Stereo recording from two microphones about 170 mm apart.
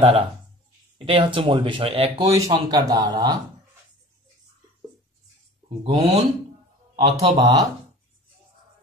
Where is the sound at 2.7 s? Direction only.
20° right (ahead or behind).